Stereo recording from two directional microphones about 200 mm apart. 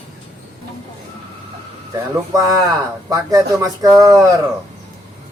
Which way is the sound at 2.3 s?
15° right (ahead or behind).